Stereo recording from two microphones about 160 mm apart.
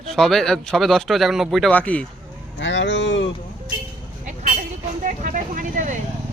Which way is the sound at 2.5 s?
90° left.